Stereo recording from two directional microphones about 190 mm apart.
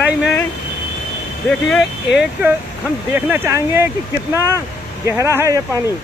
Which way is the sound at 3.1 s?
10° right (ahead or behind).